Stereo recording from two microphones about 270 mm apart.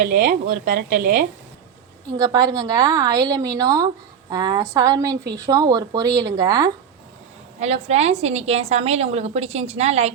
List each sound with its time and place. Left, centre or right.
0.1 s speech: right
0.9 s a woman's voice: right
2.0 s a woman's voice: centre
7.6 s a woman's voice: right